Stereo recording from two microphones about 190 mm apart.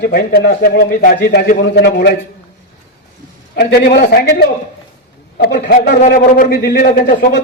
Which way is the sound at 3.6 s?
55° left (ahead or behind).